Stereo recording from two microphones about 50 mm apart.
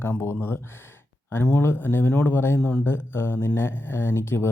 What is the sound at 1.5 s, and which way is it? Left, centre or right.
Speech, left.